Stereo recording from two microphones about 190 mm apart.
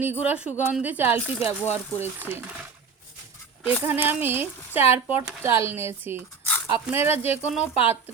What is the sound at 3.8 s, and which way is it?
Speech, 10° right (ahead or behind).